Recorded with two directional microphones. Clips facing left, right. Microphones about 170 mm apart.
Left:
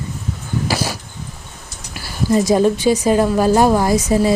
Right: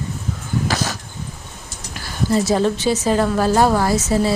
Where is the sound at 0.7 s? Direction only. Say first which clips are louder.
Left 4 dB; 10° left (ahead or behind).